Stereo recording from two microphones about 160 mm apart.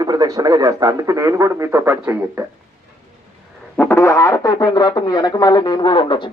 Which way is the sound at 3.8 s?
15° left (ahead or behind).